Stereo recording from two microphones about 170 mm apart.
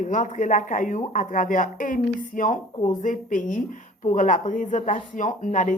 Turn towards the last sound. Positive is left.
turn(degrees=50)  # may be behind; listen again after turning